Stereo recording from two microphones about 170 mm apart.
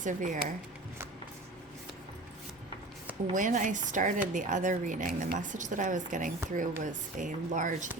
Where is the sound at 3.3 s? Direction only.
50° right (ahead or behind).